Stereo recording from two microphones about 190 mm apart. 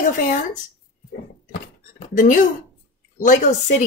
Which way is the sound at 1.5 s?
45° left (ahead or behind).